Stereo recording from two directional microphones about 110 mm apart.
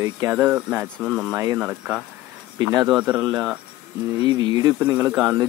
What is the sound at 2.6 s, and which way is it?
Speech, 35° right (ahead or behind).